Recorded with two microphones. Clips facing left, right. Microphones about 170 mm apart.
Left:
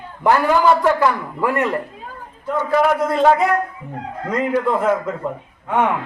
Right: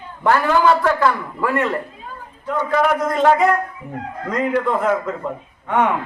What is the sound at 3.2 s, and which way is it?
A man's voice, 5° left (ahead or behind).